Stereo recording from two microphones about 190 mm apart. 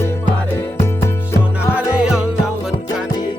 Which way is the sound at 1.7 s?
5° right (ahead or behind).